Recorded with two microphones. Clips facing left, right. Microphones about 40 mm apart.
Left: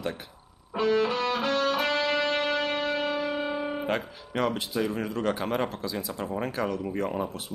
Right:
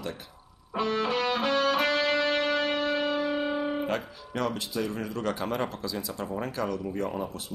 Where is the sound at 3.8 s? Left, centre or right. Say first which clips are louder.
Left 1 dB; left.